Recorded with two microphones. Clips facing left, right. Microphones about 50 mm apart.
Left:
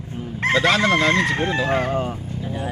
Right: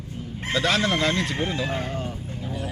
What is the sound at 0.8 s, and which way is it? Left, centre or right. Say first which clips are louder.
Speech: left 6 dB; left.